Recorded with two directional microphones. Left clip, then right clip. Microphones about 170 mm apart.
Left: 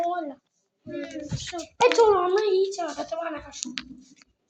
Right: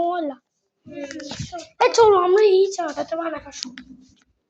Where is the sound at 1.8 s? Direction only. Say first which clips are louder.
Right 4 dB; 80° right; by 3.4 s 40° right (ahead or behind).